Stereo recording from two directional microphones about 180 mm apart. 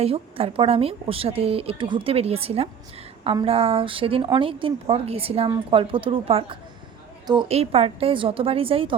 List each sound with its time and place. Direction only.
0.0 s a woman's voice: 35° right (ahead or behind)